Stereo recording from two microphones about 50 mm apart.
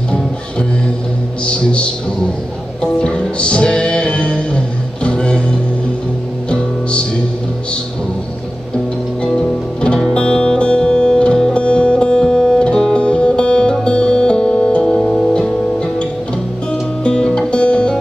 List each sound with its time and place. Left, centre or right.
1.4 s music: left
9.2 s music: centre